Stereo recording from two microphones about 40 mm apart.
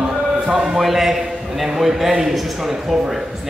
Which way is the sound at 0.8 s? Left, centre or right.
Centre.